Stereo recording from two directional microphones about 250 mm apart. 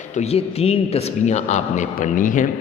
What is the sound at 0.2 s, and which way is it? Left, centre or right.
A woman's voice, left.